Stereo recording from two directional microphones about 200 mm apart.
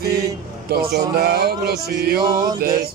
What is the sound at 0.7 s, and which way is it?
Music, 50° right (ahead or behind).